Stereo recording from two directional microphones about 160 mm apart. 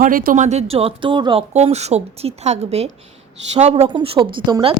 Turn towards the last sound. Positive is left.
turn(degrees=-30)  # may be behind; listen again after turning